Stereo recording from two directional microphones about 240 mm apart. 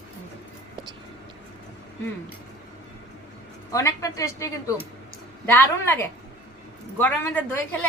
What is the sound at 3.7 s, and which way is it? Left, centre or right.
A woman's voice, centre.